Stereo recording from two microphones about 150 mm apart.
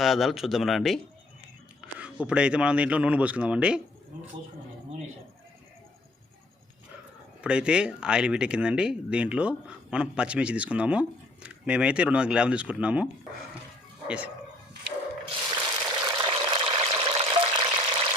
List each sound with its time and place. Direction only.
0.0 s speech: centre (ahead or behind)
1.8 s a sound: 5° right (ahead or behind)
2.2 s speech: 5° right (ahead or behind)
7.4 s speech: 5° right (ahead or behind)
15.3 s water: 30° right (ahead or behind)